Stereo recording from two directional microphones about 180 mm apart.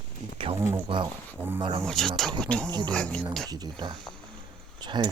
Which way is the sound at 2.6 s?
25° right (ahead or behind).